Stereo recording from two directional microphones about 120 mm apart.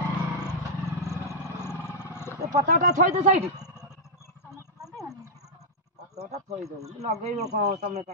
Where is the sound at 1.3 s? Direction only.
20° left (ahead or behind).